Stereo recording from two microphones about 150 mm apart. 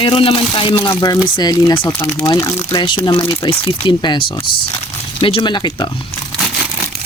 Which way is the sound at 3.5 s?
35° left (ahead or behind).